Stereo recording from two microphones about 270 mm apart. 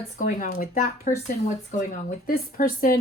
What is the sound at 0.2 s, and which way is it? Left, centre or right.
A woman's voice, left.